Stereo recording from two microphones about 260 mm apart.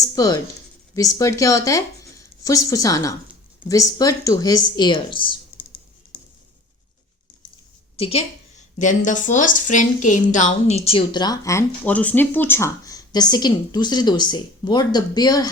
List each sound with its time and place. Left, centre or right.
0.2 s a woman's voice: centre
7.9 s a woman's voice: left